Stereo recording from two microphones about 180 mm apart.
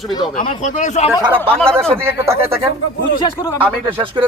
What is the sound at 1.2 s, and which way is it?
Speech, 30° right (ahead or behind).